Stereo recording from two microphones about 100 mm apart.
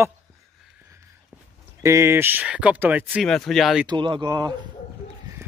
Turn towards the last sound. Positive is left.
turn(degrees=-40)  # may be behind; listen again after turning